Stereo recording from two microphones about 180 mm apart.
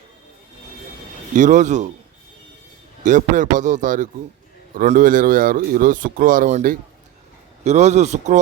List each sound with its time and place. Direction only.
1.4 s a man's voice: 45° right (ahead or behind)
3.0 s a man's voice: 45° right (ahead or behind)